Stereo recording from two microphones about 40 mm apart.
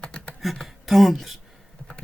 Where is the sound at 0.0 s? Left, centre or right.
Left.